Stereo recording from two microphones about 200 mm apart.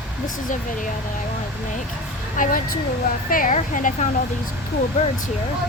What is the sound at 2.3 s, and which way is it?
Speech, 40° left (ahead or behind).